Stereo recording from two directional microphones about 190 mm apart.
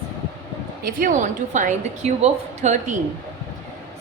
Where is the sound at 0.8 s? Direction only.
50° right (ahead or behind).